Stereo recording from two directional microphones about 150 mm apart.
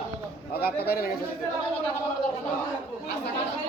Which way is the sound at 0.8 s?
90° left.